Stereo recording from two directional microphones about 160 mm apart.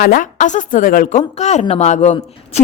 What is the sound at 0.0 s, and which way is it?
A woman's voice, 60° left (ahead or behind).